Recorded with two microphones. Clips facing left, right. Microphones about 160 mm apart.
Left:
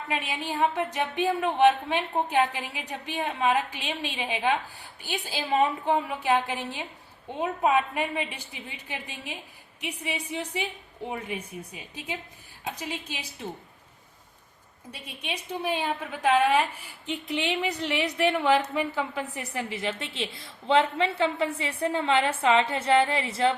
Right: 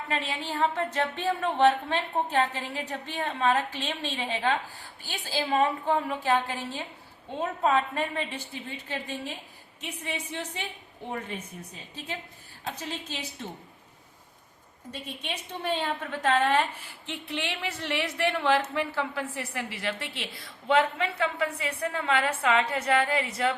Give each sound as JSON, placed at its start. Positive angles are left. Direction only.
{"t": 0.1, "sound": "a woman's voice", "side_deg": 15}
{"t": 14.9, "sound": "a woman's voice", "side_deg": 10}